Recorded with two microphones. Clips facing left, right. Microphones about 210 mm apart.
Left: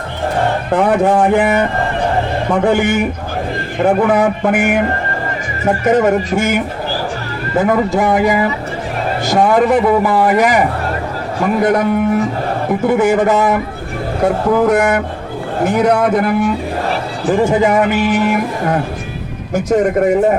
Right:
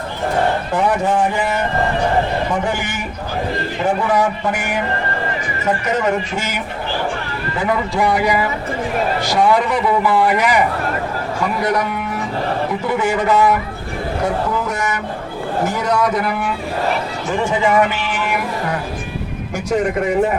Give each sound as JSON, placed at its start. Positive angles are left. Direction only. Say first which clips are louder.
{"t": 0.7, "sound": "speech", "louder": "left 5 dB", "side_deg": 55}
{"t": 17.2, "sound": "speech", "louder": "left 6 dB", "side_deg": 35}